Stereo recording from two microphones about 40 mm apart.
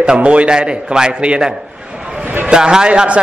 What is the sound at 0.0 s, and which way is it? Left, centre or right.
A man's voice, right.